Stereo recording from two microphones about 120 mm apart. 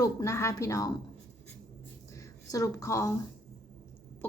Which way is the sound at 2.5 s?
25° left (ahead or behind).